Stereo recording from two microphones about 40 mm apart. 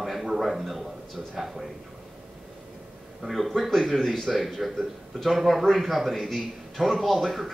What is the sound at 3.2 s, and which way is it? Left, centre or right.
A man's voice, centre.